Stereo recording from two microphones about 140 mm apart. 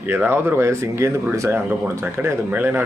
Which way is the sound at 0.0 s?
15° right (ahead or behind).